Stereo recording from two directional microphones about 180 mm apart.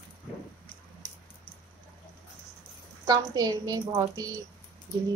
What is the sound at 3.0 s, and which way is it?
A woman's voice, 20° right (ahead or behind).